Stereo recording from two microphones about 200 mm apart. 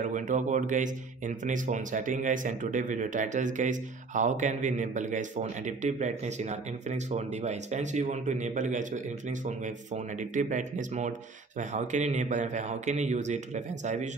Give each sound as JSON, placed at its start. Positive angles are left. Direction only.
{"t": 0.0, "sound": "speech", "side_deg": -40}
{"t": 10.3, "sound": "speech", "side_deg": -40}